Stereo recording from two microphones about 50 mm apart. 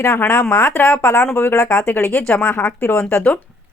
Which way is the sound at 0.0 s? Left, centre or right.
Left.